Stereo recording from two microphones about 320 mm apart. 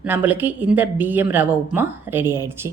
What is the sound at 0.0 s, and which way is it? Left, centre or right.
A woman's voice, centre.